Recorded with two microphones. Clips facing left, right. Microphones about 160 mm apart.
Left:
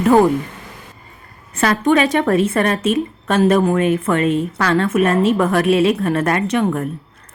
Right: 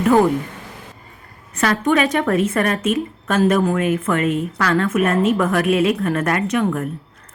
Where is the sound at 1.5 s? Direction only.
30° left (ahead or behind).